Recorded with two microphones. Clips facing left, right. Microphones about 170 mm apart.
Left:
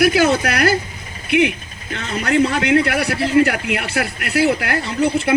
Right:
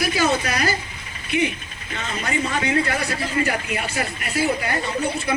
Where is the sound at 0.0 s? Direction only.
65° left (ahead or behind).